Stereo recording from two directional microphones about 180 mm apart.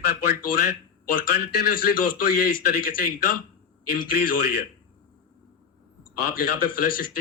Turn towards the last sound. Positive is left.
turn(degrees=50)  # may be behind; listen again after turning